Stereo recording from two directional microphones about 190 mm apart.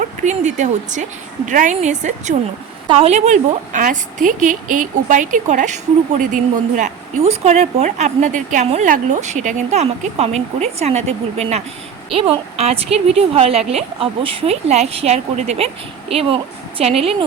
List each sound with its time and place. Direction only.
0.2 s a woman's voice: 40° right (ahead or behind)
2.8 s a woman's voice: 30° right (ahead or behind)